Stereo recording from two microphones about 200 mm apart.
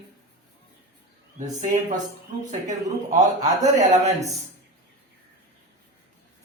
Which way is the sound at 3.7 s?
35° right (ahead or behind).